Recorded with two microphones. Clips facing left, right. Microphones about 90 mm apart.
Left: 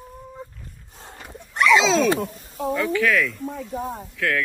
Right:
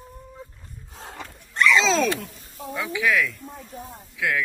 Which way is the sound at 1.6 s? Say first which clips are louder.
Left 3 dB; centre (ahead or behind).